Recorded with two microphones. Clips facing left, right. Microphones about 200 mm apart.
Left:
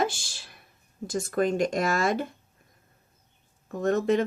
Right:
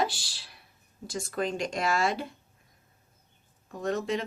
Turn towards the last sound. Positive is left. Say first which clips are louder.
# left 6 dB
turn(degrees=50)  # may be behind; listen again after turning